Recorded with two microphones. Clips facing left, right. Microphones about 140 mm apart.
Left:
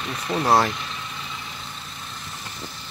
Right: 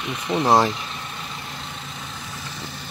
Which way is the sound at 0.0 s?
15° right (ahead or behind).